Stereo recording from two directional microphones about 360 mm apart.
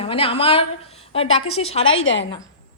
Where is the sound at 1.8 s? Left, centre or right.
Left.